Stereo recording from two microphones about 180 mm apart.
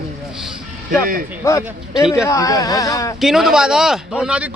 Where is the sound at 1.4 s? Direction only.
15° left (ahead or behind).